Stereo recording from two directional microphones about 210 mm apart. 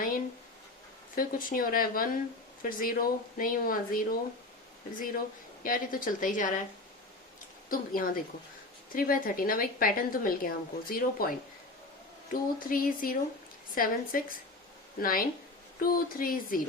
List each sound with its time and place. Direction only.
1.1 s a woman's voice: 40° left (ahead or behind)
7.7 s a woman's voice: 45° left (ahead or behind)